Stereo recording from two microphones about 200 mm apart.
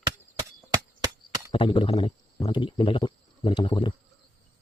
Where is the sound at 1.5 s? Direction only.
25° left (ahead or behind).